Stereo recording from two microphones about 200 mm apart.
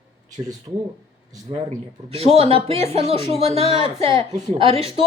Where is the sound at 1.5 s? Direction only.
25° right (ahead or behind).